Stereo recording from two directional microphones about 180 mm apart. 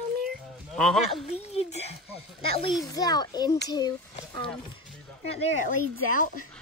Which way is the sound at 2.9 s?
20° left (ahead or behind).